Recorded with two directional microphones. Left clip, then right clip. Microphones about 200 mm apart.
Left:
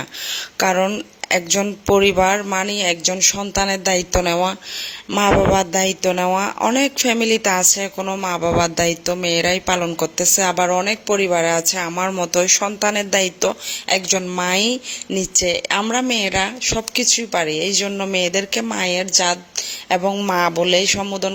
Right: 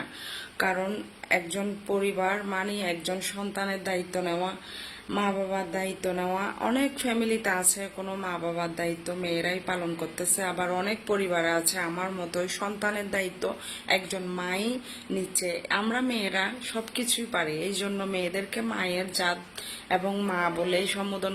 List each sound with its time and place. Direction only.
0.6 s speech: 40° left (ahead or behind)
15.8 s speech: 35° left (ahead or behind)